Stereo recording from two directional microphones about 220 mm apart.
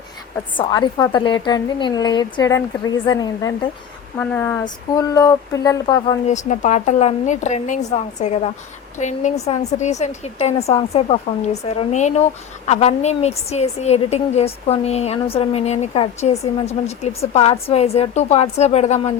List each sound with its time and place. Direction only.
0.5 s a woman's voice: 20° left (ahead or behind)
6.5 s a woman's voice: 35° left (ahead or behind)